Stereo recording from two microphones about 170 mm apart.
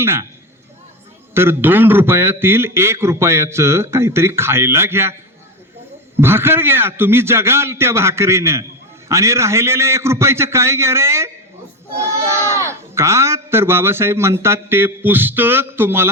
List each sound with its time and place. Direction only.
0.0 s a man's voice: 15° right (ahead or behind)
1.3 s a man's voice: 15° right (ahead or behind)
6.1 s a man's voice: 15° right (ahead or behind)